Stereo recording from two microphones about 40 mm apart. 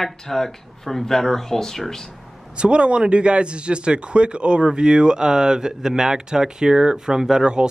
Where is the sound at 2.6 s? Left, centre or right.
Right.